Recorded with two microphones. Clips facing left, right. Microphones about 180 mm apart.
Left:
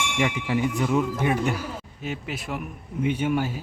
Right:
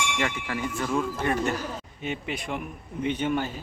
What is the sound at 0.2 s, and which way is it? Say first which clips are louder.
Speech: left 5 dB; 15° left (ahead or behind).